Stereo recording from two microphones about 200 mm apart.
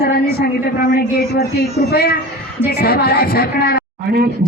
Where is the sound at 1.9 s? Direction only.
50° left (ahead or behind).